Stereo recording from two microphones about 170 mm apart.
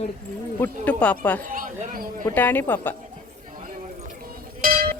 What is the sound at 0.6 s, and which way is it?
Speech, 10° left (ahead or behind).